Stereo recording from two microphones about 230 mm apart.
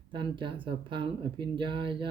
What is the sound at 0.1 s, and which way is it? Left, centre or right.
Speech, right.